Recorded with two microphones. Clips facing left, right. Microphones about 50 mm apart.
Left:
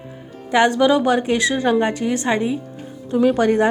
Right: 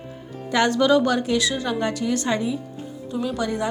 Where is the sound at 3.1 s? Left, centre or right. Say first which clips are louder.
Left 10 dB; left.